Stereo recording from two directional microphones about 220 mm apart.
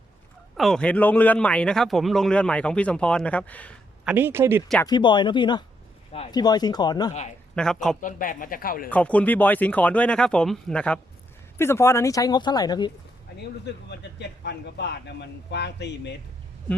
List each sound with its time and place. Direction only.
0.5 s a man's voice: centre (ahead or behind)
4.0 s speech: 10° right (ahead or behind)
4.9 s speech: 20° left (ahead or behind)
7.1 s speech: 30° left (ahead or behind)
7.5 s a man's voice: 5° left (ahead or behind)
8.0 s speech: 40° left (ahead or behind)
8.9 s speech: 5° left (ahead or behind)
13.9 s speech: 50° left (ahead or behind)